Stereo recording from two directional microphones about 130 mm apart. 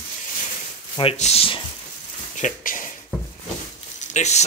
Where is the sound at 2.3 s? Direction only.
80° left.